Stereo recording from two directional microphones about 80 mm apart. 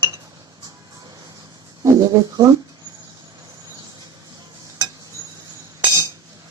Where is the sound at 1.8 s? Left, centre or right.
Right.